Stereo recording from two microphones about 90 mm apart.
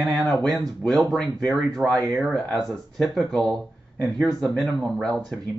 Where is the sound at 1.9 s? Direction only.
40° right (ahead or behind).